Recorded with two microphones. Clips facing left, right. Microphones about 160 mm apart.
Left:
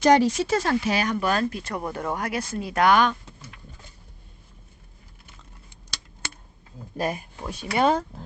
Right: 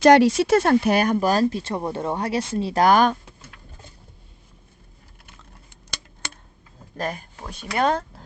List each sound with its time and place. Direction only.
0.0 s speech: 85° right; by 1.1 s 55° right (ahead or behind)
1.1 s speech: 35° right (ahead or behind)
6.9 s speech: 10° left (ahead or behind)